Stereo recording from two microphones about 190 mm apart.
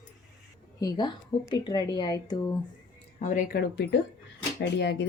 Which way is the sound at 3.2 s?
45° left (ahead or behind).